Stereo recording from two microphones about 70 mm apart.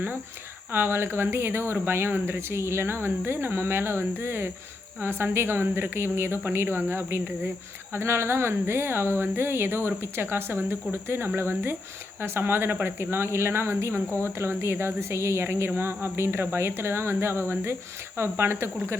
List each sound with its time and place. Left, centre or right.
0.7 s speech: right